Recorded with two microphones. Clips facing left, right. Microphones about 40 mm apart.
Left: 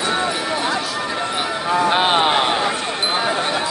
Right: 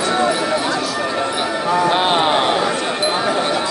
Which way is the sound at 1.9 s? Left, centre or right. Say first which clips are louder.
Right 1 dB; left.